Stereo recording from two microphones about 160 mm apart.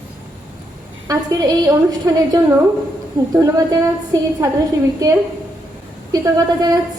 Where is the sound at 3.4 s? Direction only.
25° right (ahead or behind).